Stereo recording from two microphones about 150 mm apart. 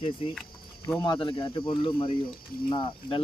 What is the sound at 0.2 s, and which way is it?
Speech, 40° left (ahead or behind).